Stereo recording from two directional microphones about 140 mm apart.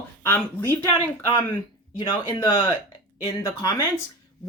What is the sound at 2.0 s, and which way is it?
Speech, 35° left (ahead or behind).